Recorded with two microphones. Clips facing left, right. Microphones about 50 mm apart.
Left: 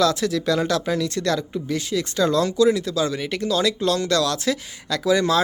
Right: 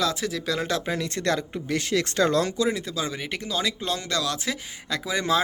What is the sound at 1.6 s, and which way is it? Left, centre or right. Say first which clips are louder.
Speech: left 1 dB; right.